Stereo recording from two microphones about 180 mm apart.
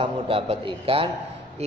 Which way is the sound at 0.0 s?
30° right (ahead or behind).